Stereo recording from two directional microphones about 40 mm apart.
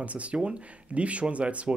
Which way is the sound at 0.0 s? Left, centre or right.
Right.